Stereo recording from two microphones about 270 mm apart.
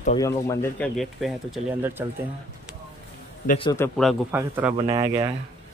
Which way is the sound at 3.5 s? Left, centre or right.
Centre.